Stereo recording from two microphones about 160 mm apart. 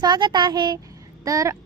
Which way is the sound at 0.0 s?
25° right (ahead or behind).